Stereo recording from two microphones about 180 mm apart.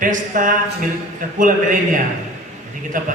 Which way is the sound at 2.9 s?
45° right (ahead or behind).